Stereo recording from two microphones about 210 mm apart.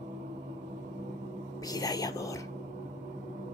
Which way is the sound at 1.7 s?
15° left (ahead or behind).